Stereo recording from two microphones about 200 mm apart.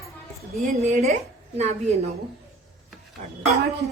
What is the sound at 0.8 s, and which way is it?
A woman's voice, 35° right (ahead or behind).